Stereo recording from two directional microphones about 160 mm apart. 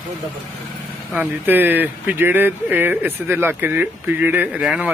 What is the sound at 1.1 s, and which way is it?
Speech, 10° right (ahead or behind).